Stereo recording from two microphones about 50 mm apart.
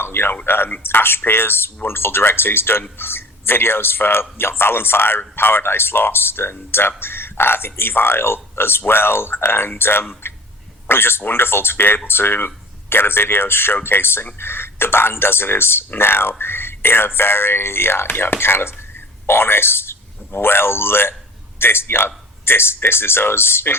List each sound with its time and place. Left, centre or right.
0.0 s speech: left
16.4 s a sound: left
17.2 s a man's voice: left